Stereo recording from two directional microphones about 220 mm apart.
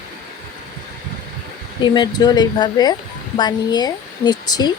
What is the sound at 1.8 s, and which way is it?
A woman's voice, 20° left (ahead or behind).